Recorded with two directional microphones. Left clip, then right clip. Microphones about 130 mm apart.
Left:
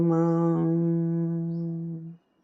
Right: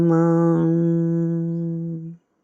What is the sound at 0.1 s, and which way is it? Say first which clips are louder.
Music: right 6 dB; 40° right (ahead or behind).